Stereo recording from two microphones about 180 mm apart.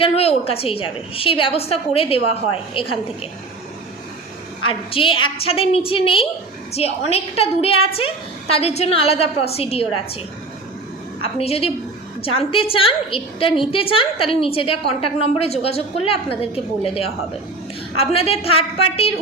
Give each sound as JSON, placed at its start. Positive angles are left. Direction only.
{"t": 0.0, "sound": "a woman's voice", "side_deg": 35}
{"t": 4.6, "sound": "a woman's voice", "side_deg": 30}
{"t": 11.2, "sound": "a woman's voice", "side_deg": 35}